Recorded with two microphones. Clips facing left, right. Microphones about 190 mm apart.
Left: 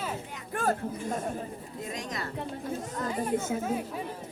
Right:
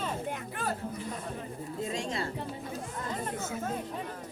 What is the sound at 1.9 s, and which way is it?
Speech, 30° right (ahead or behind).